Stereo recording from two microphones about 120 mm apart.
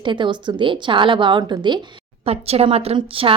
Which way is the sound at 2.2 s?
55° right (ahead or behind).